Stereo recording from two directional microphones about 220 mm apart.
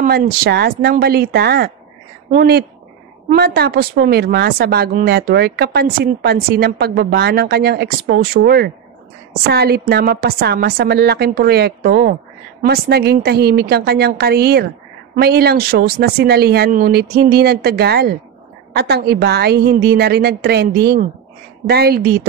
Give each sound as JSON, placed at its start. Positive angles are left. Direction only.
{"t": 0.0, "sound": "a woman's voice", "side_deg": -45}